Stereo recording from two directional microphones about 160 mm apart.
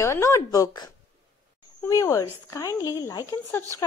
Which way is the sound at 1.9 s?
20° left (ahead or behind).